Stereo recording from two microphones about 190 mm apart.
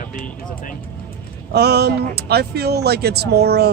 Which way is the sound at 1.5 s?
60° right (ahead or behind).